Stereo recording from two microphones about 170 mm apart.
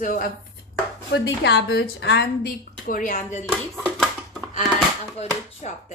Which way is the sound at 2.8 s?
55° left (ahead or behind).